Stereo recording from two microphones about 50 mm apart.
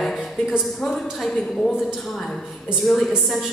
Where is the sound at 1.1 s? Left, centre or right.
Centre.